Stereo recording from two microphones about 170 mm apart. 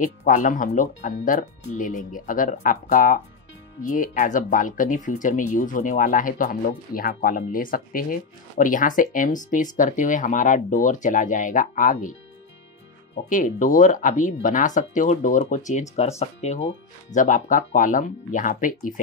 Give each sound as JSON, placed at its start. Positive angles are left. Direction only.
{"t": 0.0, "sound": "speech", "side_deg": 45}
{"t": 13.3, "sound": "speech", "side_deg": 50}